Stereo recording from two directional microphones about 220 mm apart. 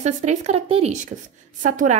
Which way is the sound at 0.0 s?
30° right (ahead or behind).